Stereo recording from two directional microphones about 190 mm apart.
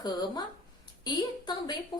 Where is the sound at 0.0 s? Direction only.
20° left (ahead or behind).